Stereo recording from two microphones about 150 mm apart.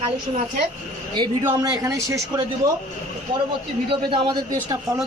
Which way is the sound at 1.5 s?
25° right (ahead or behind).